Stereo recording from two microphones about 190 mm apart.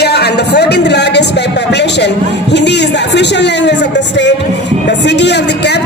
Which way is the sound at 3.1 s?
65° left (ahead or behind).